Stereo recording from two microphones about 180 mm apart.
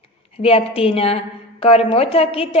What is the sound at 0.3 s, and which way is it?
A woman's voice, 30° left (ahead or behind).